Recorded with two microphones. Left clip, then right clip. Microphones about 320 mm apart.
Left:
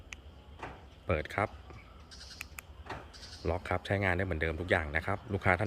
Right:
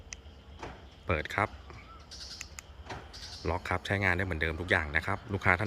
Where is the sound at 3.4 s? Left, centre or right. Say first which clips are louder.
Right 1 dB; centre.